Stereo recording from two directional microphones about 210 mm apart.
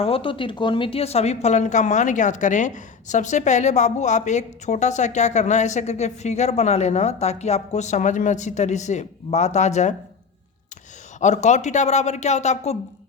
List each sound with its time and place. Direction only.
0.0 s a woman's voice: 25° left (ahead or behind)
11.2 s a woman's voice: 35° left (ahead or behind)